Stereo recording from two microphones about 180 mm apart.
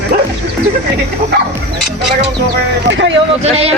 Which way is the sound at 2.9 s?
80° right.